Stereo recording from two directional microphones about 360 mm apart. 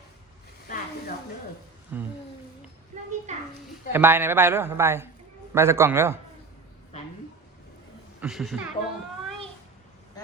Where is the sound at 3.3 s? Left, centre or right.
Centre.